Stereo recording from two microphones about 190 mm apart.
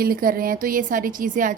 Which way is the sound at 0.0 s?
50° right (ahead or behind).